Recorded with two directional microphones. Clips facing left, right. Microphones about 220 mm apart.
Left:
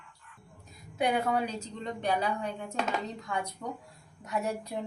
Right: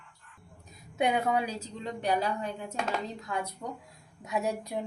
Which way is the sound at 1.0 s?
20° right (ahead or behind).